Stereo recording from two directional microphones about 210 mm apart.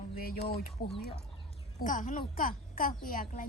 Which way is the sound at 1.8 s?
40° left (ahead or behind).